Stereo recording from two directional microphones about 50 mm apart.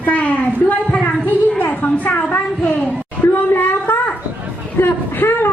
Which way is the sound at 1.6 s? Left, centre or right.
Left.